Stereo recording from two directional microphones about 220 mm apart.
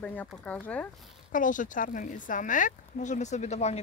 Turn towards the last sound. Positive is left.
turn(degrees=30)  # may be behind; listen again after turning